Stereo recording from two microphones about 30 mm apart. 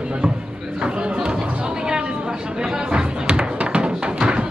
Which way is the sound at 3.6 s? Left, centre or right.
Right.